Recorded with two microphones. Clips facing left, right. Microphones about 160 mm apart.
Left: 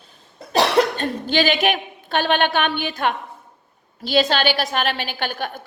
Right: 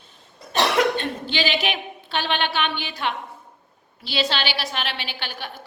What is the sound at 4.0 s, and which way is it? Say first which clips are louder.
A woman's voice: left 7 dB; 45° left (ahead or behind).